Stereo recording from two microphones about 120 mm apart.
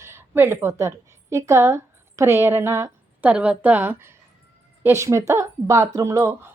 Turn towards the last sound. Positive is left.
turn(degrees=-25)  # may be behind; listen again after turning